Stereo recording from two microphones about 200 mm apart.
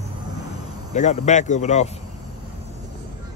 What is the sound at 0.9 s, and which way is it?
Speech, 35° left (ahead or behind).